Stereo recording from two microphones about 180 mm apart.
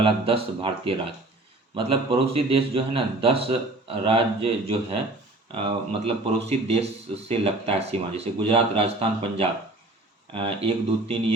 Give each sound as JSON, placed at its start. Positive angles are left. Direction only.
{"t": 0.0, "sound": "a man's voice", "side_deg": -30}